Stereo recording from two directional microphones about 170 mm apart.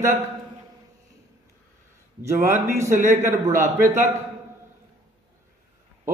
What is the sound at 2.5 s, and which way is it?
A man's voice, 15° right (ahead or behind).